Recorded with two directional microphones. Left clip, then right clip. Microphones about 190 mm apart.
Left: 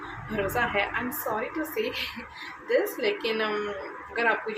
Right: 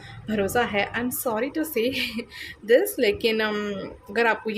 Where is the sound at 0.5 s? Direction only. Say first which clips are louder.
Right 2 dB; 55° right (ahead or behind).